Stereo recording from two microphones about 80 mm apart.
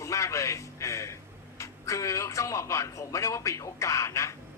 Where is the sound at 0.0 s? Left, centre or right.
Left.